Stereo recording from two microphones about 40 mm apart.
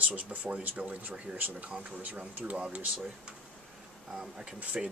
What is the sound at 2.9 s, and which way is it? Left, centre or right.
Speech, centre.